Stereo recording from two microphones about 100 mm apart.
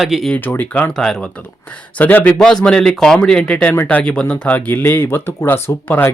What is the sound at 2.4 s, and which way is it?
Speech, 5° left (ahead or behind).